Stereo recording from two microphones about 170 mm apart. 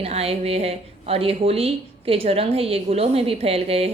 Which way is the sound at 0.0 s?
35° right (ahead or behind).